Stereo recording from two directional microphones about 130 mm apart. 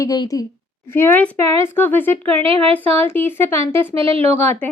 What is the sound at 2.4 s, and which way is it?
Speech, 50° right (ahead or behind).